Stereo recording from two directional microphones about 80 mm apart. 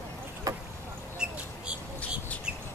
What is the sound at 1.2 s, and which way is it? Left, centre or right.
Mouse, centre.